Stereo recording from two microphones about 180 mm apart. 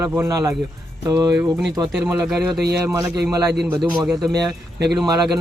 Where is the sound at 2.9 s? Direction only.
20° right (ahead or behind).